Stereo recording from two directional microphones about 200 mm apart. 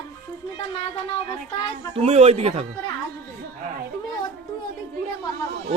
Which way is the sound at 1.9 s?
30° right (ahead or behind).